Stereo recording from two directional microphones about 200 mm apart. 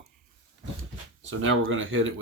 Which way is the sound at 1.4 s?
85° right.